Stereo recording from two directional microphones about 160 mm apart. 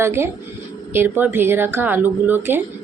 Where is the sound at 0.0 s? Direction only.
15° right (ahead or behind).